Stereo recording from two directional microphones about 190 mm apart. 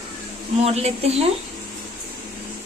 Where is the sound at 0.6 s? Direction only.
35° right (ahead or behind).